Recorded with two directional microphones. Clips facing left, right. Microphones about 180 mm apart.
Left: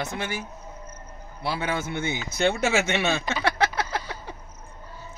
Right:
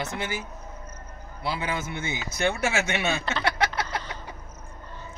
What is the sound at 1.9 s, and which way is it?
Speech, 25° left (ahead or behind).